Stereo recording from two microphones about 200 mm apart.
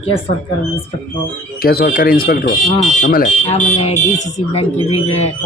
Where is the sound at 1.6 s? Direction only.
50° left (ahead or behind).